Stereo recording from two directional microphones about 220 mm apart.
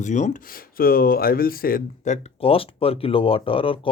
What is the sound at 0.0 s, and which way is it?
Speech, 35° left (ahead or behind).